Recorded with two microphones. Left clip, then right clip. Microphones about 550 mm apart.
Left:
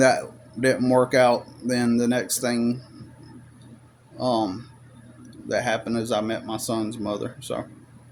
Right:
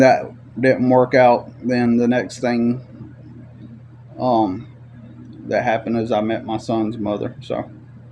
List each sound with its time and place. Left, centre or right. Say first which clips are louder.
0.6 s speech: right 5 dB; left
4.2 s speech: right 6 dB; left